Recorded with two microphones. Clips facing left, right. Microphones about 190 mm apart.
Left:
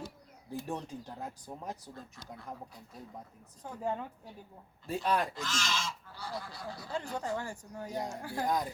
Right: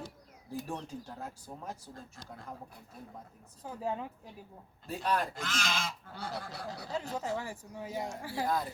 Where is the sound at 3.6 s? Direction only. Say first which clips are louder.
Even; 5° right (ahead or behind).